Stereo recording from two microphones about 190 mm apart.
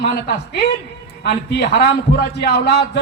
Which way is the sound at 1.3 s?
60° left (ahead or behind).